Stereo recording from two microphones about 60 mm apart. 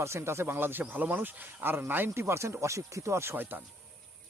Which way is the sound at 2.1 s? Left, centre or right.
Right.